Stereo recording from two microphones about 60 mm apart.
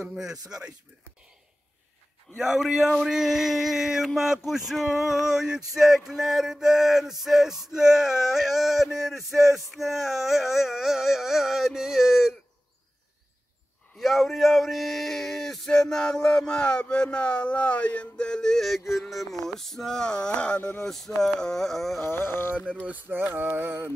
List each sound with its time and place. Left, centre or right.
0.1 s speech: centre
2.3 s male singing: centre
13.9 s speech: centre; by 20.7 s left
20.8 s male singing: centre
22.0 s music: left
22.8 s a sound: right